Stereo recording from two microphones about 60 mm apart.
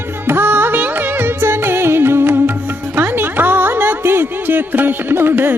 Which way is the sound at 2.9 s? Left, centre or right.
Right.